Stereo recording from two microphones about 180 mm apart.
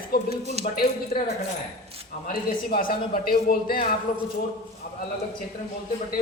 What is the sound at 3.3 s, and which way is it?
Speech, 55° left (ahead or behind).